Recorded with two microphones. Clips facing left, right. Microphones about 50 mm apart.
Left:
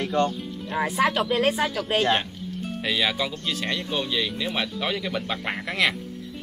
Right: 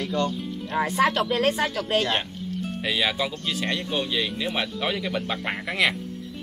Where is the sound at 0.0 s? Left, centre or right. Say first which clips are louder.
Left 2 dB; left.